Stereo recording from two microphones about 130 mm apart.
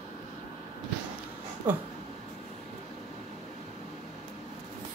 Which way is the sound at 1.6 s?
15° right (ahead or behind).